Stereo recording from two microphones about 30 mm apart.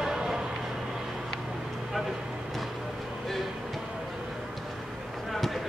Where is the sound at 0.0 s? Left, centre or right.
Centre.